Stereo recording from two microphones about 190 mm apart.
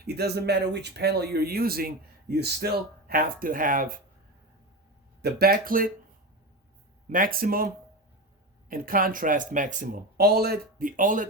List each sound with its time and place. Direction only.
0.0 s speech: 60° right (ahead or behind)
5.2 s speech: 55° right (ahead or behind)
7.1 s speech: 50° right (ahead or behind)
8.7 s speech: 50° right (ahead or behind)